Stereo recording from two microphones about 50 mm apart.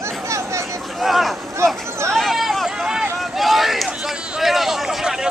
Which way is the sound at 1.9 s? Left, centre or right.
Right.